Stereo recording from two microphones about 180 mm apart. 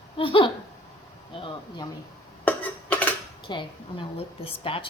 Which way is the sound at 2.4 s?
5° left (ahead or behind).